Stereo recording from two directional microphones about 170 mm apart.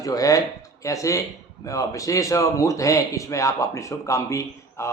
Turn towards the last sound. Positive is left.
turn(degrees=15)  # may be behind; listen again after turning